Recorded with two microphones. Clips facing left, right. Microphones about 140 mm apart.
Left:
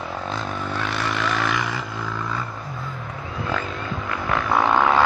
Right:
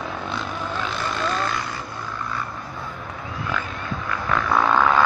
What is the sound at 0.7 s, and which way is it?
Vehicle, 70° left (ahead or behind).